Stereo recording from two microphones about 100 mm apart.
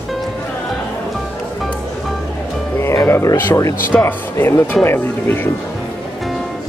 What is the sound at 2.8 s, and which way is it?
Speech, 30° left (ahead or behind).